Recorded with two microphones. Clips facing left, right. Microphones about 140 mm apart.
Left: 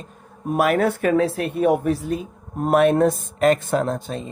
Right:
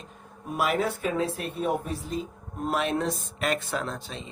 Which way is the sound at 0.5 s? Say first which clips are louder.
Left 8 dB; 60° left (ahead or behind).